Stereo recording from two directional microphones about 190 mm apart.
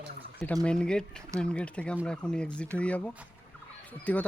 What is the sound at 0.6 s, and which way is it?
Speech, 5° left (ahead or behind).